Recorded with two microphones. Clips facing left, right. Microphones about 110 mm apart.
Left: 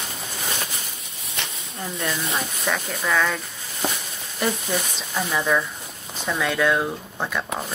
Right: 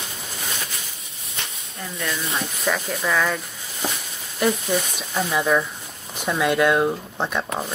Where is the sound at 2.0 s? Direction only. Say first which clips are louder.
Even; 30° left (ahead or behind).